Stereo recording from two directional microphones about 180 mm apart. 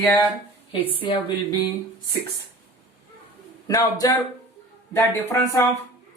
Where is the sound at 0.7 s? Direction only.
30° left (ahead or behind).